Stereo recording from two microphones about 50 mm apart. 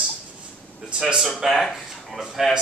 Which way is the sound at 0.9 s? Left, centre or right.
Centre.